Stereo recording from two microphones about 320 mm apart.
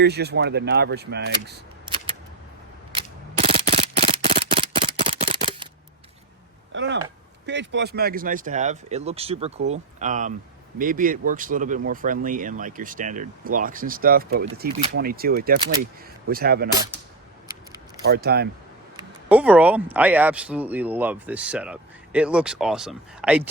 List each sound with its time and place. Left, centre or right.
0.0 s speech: right
2.9 s a sound: centre
6.7 s a sound: right
7.4 s speech: right
18.0 s speech: right
18.9 s speech: centre